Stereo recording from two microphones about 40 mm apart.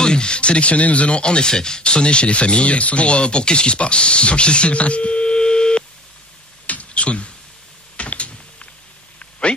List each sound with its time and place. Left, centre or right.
0.0 s speech: left
6.6 s a sound: left
8.0 s typing: left